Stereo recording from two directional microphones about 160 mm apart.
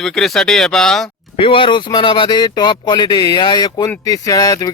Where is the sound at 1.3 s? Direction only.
35° left (ahead or behind).